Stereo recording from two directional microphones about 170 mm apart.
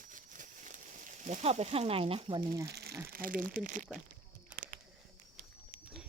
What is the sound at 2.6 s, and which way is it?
Crumpling, 70° right (ahead or behind).